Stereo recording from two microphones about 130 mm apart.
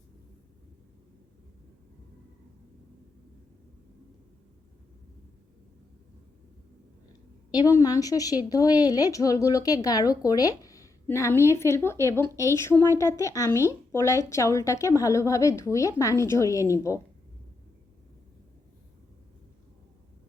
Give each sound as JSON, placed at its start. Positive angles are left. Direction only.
{"t": 7.5, "sound": "a woman's voice", "side_deg": 25}